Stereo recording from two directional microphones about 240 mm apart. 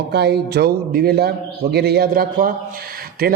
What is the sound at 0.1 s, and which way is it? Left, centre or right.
A man's voice, right.